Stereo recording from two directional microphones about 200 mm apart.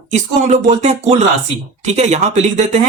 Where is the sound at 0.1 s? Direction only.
35° right (ahead or behind).